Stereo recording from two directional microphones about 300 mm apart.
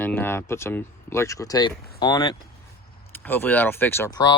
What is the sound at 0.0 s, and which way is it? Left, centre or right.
Speech, centre.